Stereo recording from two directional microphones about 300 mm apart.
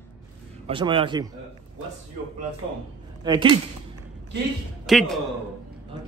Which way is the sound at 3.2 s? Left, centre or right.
Centre.